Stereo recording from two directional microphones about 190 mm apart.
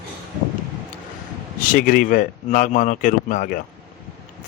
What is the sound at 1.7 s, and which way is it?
Speech, 50° left (ahead or behind).